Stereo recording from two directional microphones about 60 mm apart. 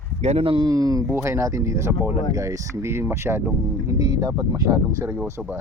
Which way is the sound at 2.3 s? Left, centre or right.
Right.